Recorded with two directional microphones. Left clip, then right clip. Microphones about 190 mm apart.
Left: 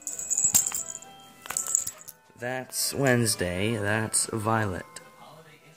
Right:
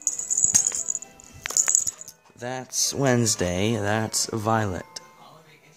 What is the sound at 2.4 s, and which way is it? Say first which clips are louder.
Speech: right 4 dB; 25° right (ahead or behind).